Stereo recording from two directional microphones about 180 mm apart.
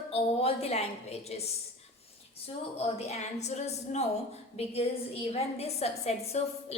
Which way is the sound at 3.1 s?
40° left (ahead or behind).